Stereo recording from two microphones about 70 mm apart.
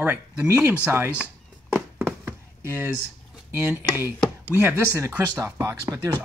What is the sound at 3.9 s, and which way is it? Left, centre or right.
Chopping, right.